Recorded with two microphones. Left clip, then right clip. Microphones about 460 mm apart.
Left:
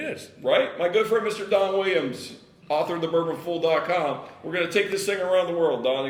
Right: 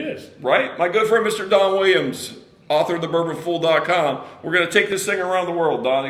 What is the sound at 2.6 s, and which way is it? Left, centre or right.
Speech, right.